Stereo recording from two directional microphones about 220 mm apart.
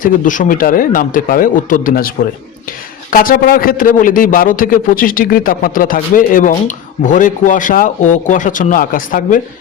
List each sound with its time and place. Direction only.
0.0 s a man's voice: 35° left (ahead or behind)